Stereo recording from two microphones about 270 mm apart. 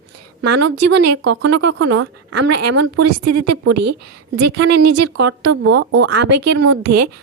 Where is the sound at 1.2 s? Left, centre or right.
Right.